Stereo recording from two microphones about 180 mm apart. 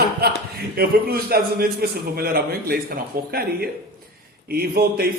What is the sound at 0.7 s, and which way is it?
A man's voice, 60° right (ahead or behind).